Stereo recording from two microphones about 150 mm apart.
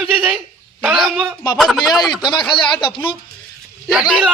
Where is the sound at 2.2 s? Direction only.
30° left (ahead or behind).